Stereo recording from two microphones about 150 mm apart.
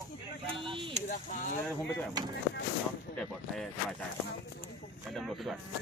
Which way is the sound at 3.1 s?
10° left (ahead or behind).